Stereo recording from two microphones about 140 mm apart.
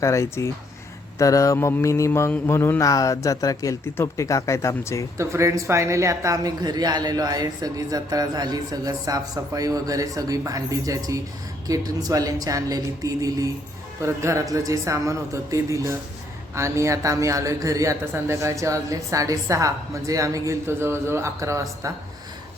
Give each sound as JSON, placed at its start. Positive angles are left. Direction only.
{"t": 0.0, "sound": "mantra", "side_deg": 20}
{"t": 5.1, "sound": "speech", "side_deg": -20}